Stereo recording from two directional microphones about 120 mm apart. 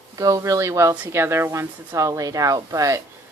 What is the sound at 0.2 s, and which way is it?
Speech, 30° right (ahead or behind).